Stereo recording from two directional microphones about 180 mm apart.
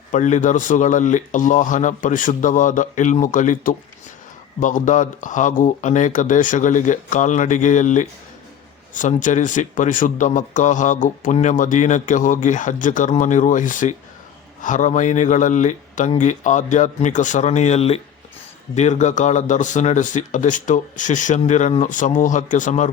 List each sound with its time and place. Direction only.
0.1 s speech: 45° left (ahead or behind)